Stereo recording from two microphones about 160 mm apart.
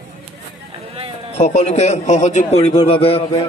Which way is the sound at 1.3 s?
40° left (ahead or behind).